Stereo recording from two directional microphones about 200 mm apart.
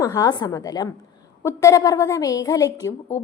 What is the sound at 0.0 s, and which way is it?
A woman's voice, 20° left (ahead or behind).